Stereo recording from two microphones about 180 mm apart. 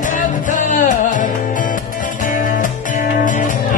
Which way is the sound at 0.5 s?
45° left (ahead or behind).